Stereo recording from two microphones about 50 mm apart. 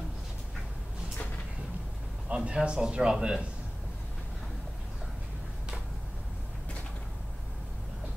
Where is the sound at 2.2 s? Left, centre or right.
Right.